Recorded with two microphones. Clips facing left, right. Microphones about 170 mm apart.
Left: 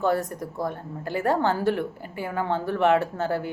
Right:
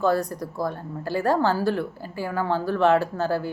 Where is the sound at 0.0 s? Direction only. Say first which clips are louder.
Right 2 dB; 20° left (ahead or behind).